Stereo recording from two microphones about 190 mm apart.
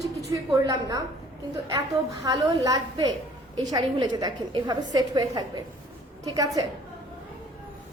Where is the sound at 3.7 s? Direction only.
20° right (ahead or behind).